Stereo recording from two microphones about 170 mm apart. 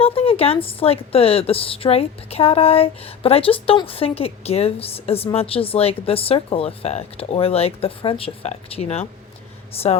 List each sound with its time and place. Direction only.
0.0 s a woman's voice: 35° left (ahead or behind)